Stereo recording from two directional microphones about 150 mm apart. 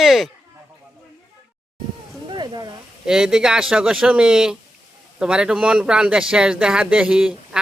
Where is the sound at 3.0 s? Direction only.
5° right (ahead or behind).